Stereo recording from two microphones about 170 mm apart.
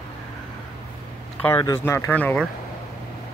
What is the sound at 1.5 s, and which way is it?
Speech, 20° left (ahead or behind).